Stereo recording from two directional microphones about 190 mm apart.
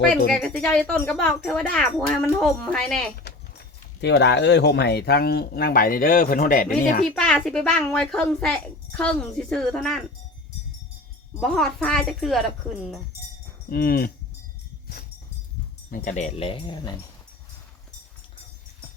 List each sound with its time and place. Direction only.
0.3 s speech: 5° left (ahead or behind)
3.3 s clip-clop: 60° left (ahead or behind)
4.0 s speech: 65° left (ahead or behind); by 7.0 s 45° left (ahead or behind)
7.0 s speech: centre (ahead or behind)
11.3 s speech: centre (ahead or behind)
13.7 s livestock: 50° left (ahead or behind)
15.9 s speech: 40° left (ahead or behind); by 16.9 s 25° left (ahead or behind)